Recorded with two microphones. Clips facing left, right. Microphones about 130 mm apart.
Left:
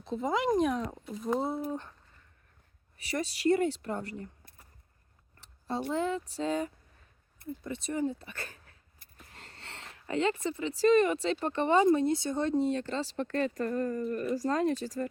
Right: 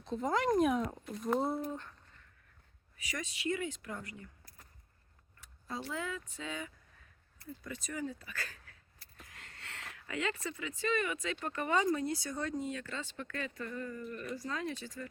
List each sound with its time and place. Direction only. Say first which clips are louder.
0.0 s speech: left 3 dB; centre (ahead or behind)
3.1 s speech: left 9 dB; 35° left (ahead or behind)
5.9 s speech: left 11 dB; 30° left (ahead or behind)
7.3 s speech: left 7 dB; 25° left (ahead or behind); by 15.1 s 40° left (ahead or behind)